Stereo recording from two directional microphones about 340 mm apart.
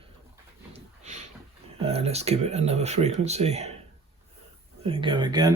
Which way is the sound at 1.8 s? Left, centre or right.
Centre.